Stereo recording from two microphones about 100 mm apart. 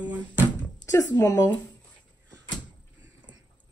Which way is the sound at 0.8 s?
25° left (ahead or behind).